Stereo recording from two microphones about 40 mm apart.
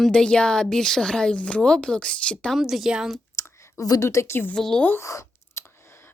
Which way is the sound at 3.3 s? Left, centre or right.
Left.